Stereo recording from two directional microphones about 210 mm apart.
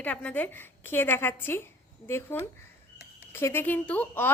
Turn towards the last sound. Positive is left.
turn(degrees=10)  # may be behind; listen again after turning